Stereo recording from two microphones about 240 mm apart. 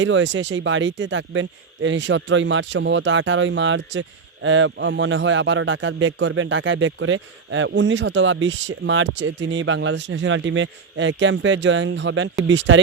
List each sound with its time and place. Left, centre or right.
0.0 s a man's voice: right